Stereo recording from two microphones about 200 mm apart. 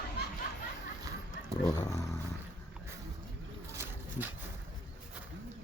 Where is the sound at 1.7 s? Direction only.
15° left (ahead or behind).